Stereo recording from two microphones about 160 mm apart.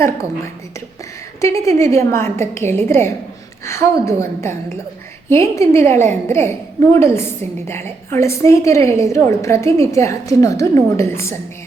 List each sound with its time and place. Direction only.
1.4 s a woman's voice: 20° left (ahead or behind)